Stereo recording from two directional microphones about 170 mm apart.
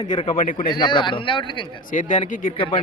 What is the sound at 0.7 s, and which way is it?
Speech, 25° left (ahead or behind).